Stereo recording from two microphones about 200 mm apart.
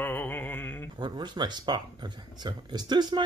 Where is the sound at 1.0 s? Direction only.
20° right (ahead or behind).